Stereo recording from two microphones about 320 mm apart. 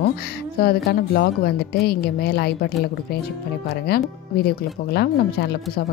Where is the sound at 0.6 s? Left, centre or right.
Left.